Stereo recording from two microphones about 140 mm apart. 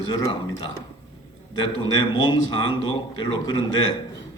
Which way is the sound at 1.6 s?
30° left (ahead or behind).